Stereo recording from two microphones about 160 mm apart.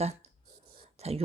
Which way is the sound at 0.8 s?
40° right (ahead or behind).